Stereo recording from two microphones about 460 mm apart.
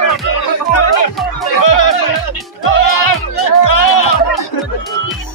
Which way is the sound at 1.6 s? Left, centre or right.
Left.